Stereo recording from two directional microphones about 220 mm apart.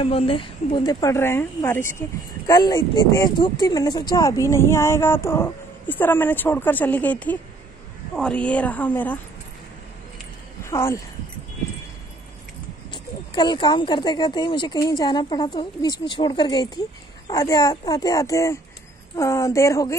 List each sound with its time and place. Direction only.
0.0 s a woman's voice: 25° left (ahead or behind); by 9.2 s 10° left (ahead or behind)
10.6 s speech: 10° left (ahead or behind)
12.9 s a woman's voice: 20° left (ahead or behind)